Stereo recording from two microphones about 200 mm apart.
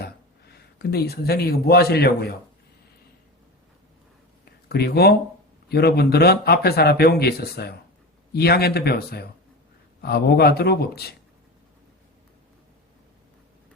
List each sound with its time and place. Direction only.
0.0 s speech: 55° left (ahead or behind)
4.7 s speech: 50° left (ahead or behind)